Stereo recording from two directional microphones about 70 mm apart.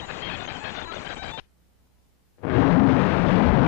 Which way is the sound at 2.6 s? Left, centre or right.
Left.